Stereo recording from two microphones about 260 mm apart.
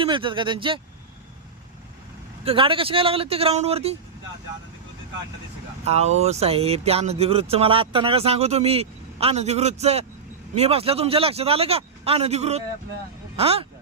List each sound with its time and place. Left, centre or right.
0.0 s speech: centre
2.4 s speech: right
5.8 s speech: right